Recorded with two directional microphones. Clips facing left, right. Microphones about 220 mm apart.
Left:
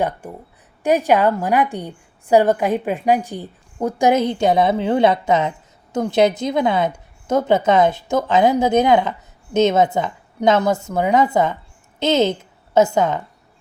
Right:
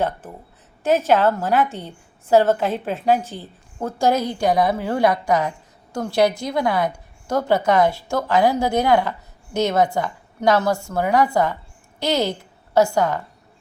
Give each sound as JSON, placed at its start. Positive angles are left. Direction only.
{"t": 0.2, "sound": "a woman's voice", "side_deg": 15}